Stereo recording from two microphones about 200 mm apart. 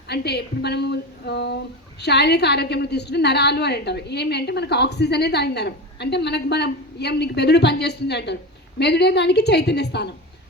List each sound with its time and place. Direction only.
0.1 s a woman's voice: 55° left (ahead or behind)